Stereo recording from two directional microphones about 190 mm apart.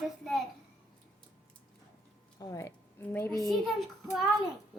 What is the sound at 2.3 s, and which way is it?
Speech, 15° left (ahead or behind).